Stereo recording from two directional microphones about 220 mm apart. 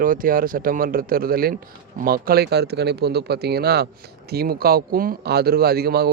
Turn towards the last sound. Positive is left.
turn(degrees=-45)  # may be behind; listen again after turning